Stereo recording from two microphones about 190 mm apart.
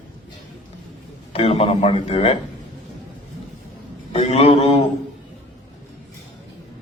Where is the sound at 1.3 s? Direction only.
30° left (ahead or behind).